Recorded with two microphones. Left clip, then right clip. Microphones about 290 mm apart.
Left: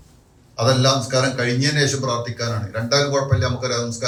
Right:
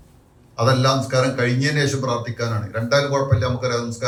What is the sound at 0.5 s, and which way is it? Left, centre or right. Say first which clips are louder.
A man's voice: left 1 dB; right.